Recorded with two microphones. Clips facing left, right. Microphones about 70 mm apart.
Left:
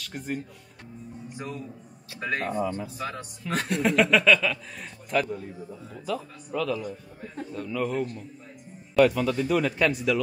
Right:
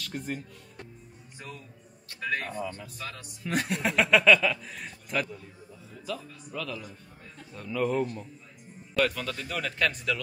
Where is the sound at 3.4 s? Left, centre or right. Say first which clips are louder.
Left 3 dB; centre.